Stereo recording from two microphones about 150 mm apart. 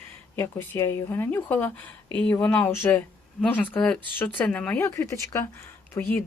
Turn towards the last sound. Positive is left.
turn(degrees=15)  # may be behind; listen again after turning